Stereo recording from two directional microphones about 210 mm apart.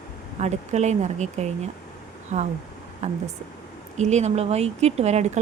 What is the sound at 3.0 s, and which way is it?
Speech, 35° right (ahead or behind).